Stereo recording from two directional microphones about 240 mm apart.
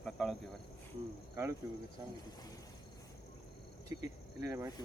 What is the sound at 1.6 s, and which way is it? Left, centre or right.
Speech, centre.